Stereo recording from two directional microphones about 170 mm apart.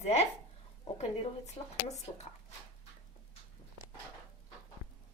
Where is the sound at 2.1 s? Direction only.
35° left (ahead or behind).